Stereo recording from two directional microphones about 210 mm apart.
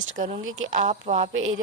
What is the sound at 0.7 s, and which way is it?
Speech, 35° right (ahead or behind).